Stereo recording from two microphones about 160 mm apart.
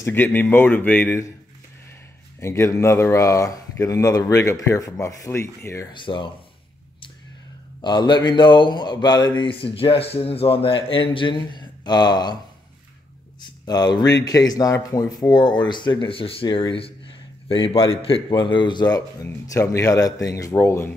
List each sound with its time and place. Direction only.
0.0 s speech: 10° left (ahead or behind)
2.4 s speech: 15° left (ahead or behind)
5.9 s a man's voice: 30° left (ahead or behind)
7.8 s speech: 30° left (ahead or behind)
13.4 s a man's voice: 25° left (ahead or behind)